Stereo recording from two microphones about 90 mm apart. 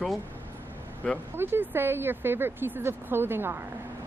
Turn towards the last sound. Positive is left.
turn(degrees=-25)  # may be behind; listen again after turning